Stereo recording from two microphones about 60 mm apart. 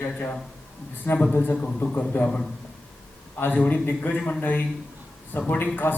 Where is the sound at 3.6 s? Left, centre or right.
Centre.